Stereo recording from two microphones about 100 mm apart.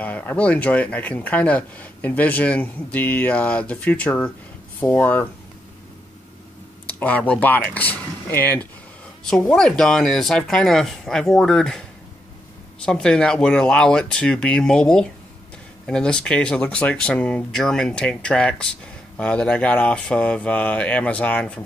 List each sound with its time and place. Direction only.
0.0 s speech: 15° left (ahead or behind)
6.9 s speech: 15° left (ahead or behind)
9.2 s speech: 5° left (ahead or behind)
12.8 s speech: 10° left (ahead or behind)